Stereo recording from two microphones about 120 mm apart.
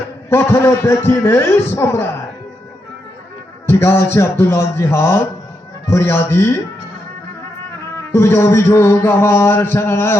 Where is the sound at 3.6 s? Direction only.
20° left (ahead or behind).